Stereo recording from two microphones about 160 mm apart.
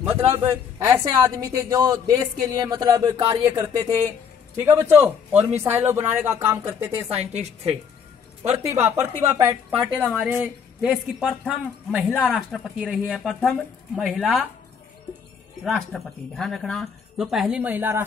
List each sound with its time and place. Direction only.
0.0 s a woman's voice: 15° right (ahead or behind)
7.1 s a woman's voice: 40° right (ahead or behind)
8.6 s a woman's voice: 15° right (ahead or behind)
15.6 s speech: centre (ahead or behind)